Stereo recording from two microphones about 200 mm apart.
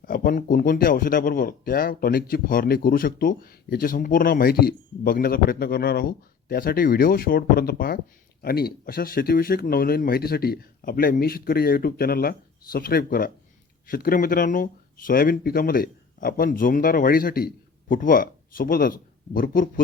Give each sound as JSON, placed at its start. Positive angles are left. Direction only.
{"t": 0.0, "sound": "speech", "side_deg": 45}